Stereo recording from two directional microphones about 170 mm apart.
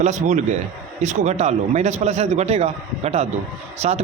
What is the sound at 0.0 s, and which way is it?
A man's voice, 45° right (ahead or behind).